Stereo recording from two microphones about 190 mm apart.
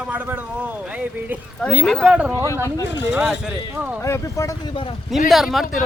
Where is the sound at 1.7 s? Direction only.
Centre (ahead or behind).